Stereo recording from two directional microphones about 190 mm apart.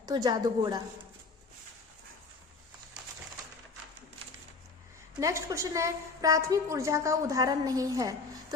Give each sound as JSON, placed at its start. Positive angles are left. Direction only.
{"t": 0.1, "sound": "a woman's voice", "side_deg": -20}
{"t": 5.1, "sound": "a woman's voice", "side_deg": -15}